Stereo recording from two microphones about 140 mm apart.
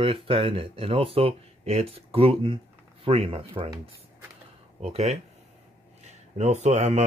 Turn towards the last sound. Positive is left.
turn(degrees=-55)  # may be behind; listen again after turning